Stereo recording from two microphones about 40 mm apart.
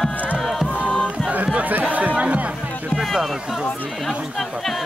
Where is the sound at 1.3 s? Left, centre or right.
Right.